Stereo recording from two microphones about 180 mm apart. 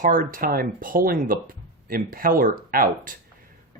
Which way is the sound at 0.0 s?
50° right (ahead or behind).